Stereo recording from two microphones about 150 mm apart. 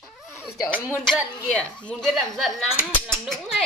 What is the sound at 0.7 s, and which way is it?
Speech, 10° left (ahead or behind).